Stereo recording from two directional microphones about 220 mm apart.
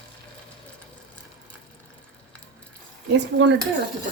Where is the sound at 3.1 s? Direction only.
55° right (ahead or behind).